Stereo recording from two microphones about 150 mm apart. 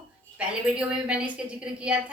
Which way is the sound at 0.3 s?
5° right (ahead or behind).